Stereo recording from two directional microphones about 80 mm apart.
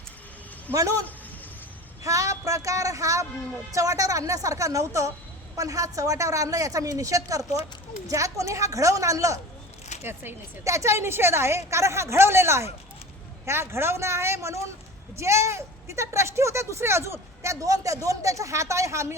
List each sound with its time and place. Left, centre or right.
0.7 s a woman's voice: right
2.0 s a woman's voice: right
10.0 s speech: right
10.6 s speech: right